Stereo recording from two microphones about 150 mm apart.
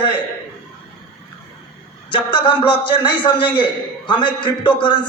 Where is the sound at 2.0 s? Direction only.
35° left (ahead or behind).